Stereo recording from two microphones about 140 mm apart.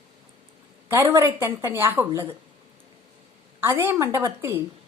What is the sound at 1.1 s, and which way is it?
A woman's voice, 20° right (ahead or behind).